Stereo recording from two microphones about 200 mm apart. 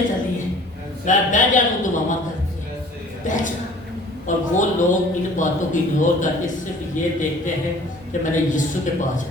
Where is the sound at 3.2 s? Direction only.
40° left (ahead or behind).